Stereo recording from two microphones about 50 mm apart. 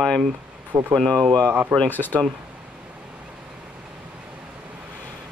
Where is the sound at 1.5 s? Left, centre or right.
Right.